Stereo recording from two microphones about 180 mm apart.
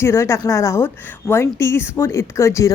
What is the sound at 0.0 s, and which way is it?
A woman's voice, 15° left (ahead or behind).